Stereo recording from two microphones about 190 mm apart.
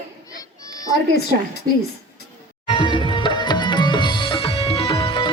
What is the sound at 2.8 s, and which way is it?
Music, 25° left (ahead or behind).